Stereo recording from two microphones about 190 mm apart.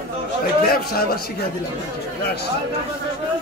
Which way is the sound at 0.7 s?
55° left (ahead or behind).